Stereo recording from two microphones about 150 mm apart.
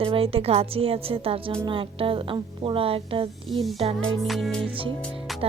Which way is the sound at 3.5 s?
Centre (ahead or behind).